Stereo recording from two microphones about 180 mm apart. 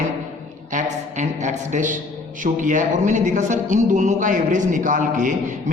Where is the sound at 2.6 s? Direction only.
45° right (ahead or behind).